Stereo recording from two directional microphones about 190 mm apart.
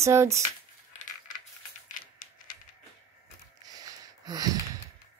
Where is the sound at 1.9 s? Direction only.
45° left (ahead or behind).